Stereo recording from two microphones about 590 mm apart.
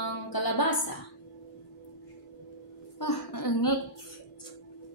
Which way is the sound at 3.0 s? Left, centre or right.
Left.